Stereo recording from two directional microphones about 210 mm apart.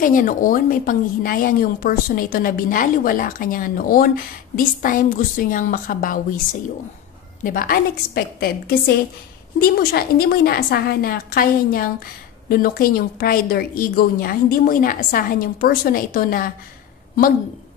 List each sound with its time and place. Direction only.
0.0 s a woman's voice: 40° left (ahead or behind)
7.4 s a woman's voice: 40° left (ahead or behind)